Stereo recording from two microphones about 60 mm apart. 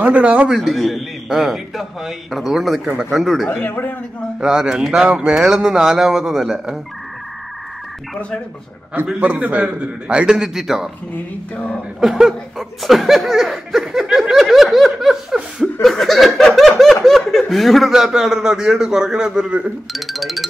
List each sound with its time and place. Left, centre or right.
0.0 s a man's voice: right
0.6 s speech: centre
3.4 s a man's voice: left
4.4 s speech: centre
9.0 s speech: centre
11.5 s speech: left
12.0 s speech: centre
19.9 s speech: centre